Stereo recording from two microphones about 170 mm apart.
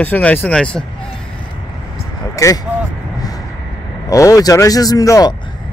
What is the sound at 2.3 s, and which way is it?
Speech, 20° left (ahead or behind).